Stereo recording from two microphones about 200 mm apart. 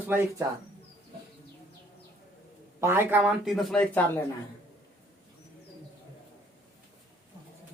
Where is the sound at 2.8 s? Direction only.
10° right (ahead or behind).